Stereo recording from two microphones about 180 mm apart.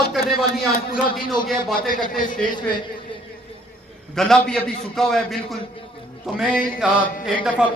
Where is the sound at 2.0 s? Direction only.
50° left (ahead or behind).